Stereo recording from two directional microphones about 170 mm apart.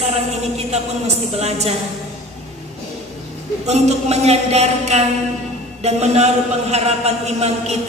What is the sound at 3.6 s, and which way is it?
A man's voice, 40° right (ahead or behind).